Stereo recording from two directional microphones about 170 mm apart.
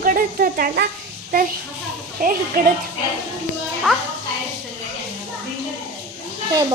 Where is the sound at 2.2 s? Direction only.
55° right (ahead or behind).